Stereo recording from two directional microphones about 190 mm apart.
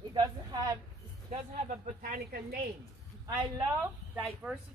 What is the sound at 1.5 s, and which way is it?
A woman's voice, 45° right (ahead or behind).